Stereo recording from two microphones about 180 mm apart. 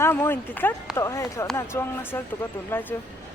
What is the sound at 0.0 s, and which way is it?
Speech, 10° left (ahead or behind).